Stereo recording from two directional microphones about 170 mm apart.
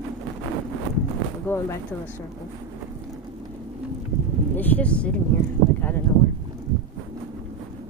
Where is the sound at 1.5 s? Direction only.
10° left (ahead or behind).